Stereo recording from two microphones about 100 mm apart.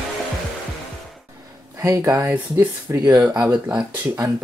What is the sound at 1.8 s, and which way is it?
Speech, 30° right (ahead or behind).